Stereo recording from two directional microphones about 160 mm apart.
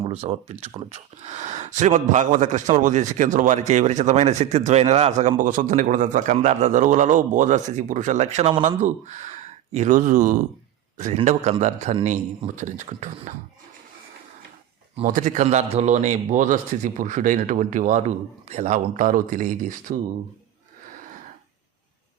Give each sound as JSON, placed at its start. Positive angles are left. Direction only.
{"t": 0.0, "sound": "a man's voice", "side_deg": -40}
{"t": 15.0, "sound": "a man's voice", "side_deg": -55}